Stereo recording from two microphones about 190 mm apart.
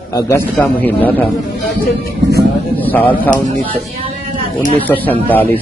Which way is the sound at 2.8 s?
10° left (ahead or behind).